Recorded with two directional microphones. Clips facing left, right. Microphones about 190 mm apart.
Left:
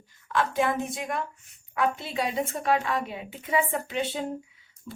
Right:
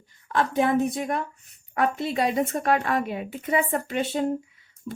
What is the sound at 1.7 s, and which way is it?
Speech, 45° right (ahead or behind).